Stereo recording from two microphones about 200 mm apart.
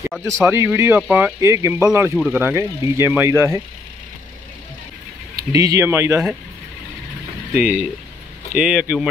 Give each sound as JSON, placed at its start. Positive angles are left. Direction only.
{"t": 0.3, "sound": "speech", "side_deg": -15}
{"t": 5.3, "sound": "speech", "side_deg": -15}
{"t": 7.5, "sound": "speech", "side_deg": -5}